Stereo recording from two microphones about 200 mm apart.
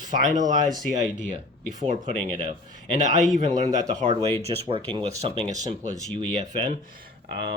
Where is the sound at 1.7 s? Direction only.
35° right (ahead or behind).